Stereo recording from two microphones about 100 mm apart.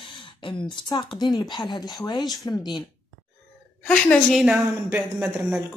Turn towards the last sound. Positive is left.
turn(degrees=-5)  # may be behind; listen again after turning